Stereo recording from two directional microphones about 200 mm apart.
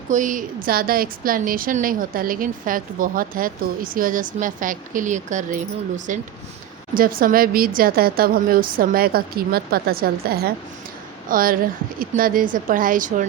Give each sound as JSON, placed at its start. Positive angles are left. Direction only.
{"t": 0.1, "sound": "a woman's voice", "side_deg": -40}